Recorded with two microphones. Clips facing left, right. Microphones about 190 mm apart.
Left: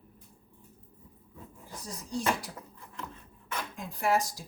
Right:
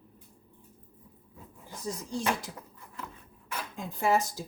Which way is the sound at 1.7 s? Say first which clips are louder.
Right 2 dB; 25° right (ahead or behind).